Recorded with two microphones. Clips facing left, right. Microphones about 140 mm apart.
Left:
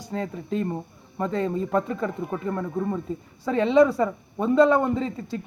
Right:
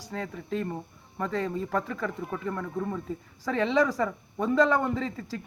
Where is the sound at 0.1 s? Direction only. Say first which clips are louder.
Left 4 dB; 20° left (ahead or behind).